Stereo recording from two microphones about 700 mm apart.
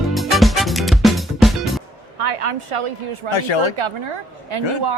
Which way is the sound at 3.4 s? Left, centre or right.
Left.